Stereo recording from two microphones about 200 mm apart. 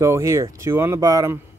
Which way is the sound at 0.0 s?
15° right (ahead or behind).